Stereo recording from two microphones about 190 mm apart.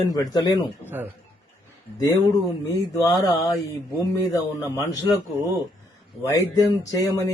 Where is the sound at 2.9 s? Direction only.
20° left (ahead or behind).